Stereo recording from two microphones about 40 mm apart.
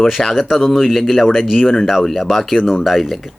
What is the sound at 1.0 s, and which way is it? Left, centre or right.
A man's voice, centre.